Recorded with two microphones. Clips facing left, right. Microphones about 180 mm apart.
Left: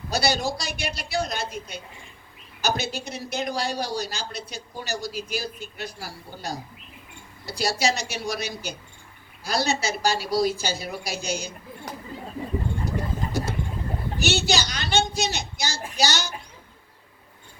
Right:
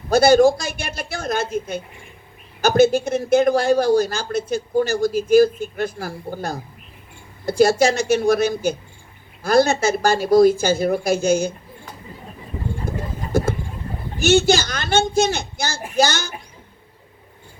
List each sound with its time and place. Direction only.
0.1 s speech: 50° right (ahead or behind)
13.3 s a sound: 50° right (ahead or behind)
14.2 s speech: 50° right (ahead or behind)